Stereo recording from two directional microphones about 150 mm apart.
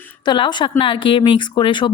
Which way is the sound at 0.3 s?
30° left (ahead or behind).